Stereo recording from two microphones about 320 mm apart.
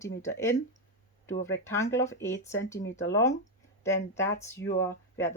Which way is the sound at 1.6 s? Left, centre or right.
Centre.